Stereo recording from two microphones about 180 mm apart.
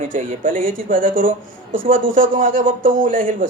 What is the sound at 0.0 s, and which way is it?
Speech, 45° right (ahead or behind).